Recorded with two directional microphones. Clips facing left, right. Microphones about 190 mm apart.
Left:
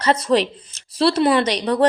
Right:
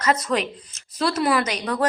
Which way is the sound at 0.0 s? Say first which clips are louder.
Left 5 dB; 30° left (ahead or behind).